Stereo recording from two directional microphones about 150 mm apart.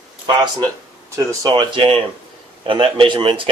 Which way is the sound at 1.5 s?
30° right (ahead or behind).